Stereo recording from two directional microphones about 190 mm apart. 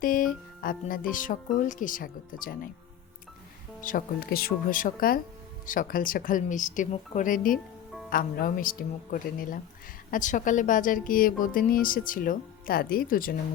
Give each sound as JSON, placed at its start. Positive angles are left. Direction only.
{"t": 0.0, "sound": "a woman's voice", "side_deg": 45}
{"t": 3.8, "sound": "a woman's voice", "side_deg": 50}